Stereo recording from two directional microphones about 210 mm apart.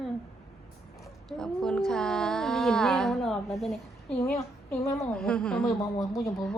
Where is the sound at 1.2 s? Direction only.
5° left (ahead or behind).